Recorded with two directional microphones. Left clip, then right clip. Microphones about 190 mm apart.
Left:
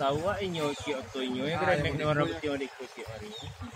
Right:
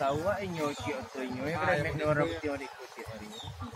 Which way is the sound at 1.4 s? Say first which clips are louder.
Left 1 dB; 65° left (ahead or behind).